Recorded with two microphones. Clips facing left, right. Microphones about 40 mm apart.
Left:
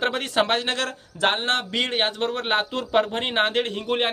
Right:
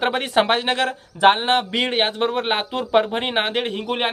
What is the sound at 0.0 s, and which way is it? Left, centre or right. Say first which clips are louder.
A man's voice: right 4 dB; centre.